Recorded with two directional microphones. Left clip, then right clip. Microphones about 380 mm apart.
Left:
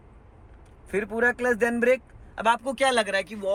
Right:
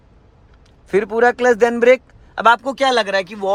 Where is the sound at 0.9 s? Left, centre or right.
Right.